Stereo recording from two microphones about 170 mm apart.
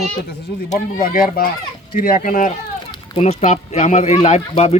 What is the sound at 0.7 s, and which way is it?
Speech, 55° left (ahead or behind).